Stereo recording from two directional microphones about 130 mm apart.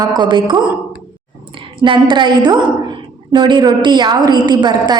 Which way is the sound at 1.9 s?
35° right (ahead or behind).